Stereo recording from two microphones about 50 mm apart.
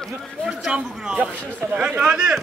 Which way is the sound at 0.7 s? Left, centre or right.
Right.